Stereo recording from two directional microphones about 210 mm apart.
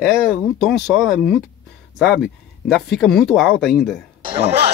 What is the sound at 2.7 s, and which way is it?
Speech, centre (ahead or behind).